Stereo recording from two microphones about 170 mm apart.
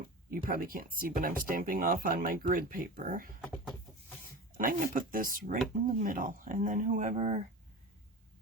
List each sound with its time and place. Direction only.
0.3 s speech: 55° right (ahead or behind)
4.5 s speech: 55° right (ahead or behind)